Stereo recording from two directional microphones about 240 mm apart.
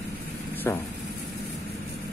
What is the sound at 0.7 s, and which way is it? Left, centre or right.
Vehicle, centre.